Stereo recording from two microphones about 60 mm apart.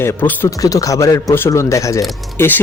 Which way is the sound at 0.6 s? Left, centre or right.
Left.